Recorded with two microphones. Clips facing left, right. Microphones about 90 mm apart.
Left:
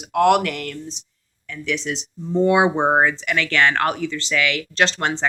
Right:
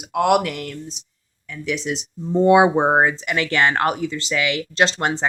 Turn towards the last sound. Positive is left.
turn(degrees=-15)  # may be behind; listen again after turning